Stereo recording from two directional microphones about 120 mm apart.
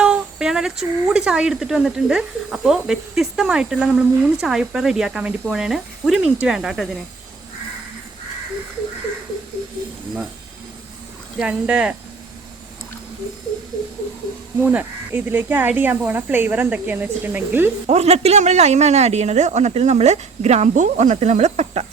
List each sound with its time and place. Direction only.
0.0 s speech: 5° right (ahead or behind)
11.3 s speech: 10° right (ahead or behind)
14.6 s speech: 15° right (ahead or behind)
17.8 s speech: 65° right (ahead or behind)